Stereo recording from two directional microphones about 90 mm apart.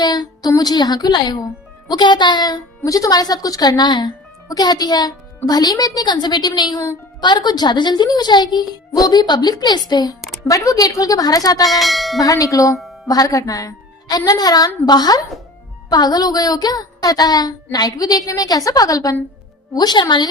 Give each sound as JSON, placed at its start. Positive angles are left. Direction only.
{"t": 0.0, "sound": "speech", "side_deg": 50}
{"t": 2.8, "sound": "a woman's voice", "side_deg": 40}
{"t": 4.4, "sound": "a woman's voice", "side_deg": 45}
{"t": 11.6, "sound": "church bell", "side_deg": 0}
{"t": 12.2, "sound": "a woman's voice", "side_deg": 40}